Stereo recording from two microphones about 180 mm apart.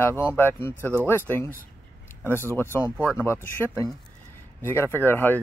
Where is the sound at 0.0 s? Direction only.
10° left (ahead or behind).